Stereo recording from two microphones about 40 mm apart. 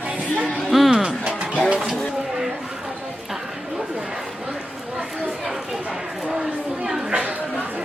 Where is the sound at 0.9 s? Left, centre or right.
Centre.